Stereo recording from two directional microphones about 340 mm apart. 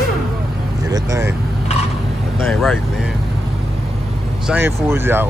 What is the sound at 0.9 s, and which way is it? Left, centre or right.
Vehicle, centre.